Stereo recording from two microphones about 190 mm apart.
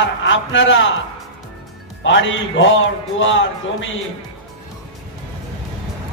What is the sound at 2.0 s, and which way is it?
A man's voice, 80° left.